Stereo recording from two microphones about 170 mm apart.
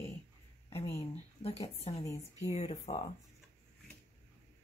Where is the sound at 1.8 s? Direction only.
40° left (ahead or behind).